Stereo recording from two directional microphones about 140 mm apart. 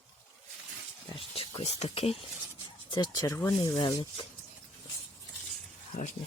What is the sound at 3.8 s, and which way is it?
Speech, 35° left (ahead or behind).